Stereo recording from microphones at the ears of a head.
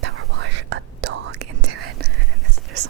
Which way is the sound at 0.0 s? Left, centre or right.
Right.